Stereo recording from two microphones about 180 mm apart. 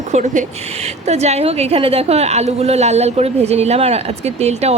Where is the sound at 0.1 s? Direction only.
40° right (ahead or behind).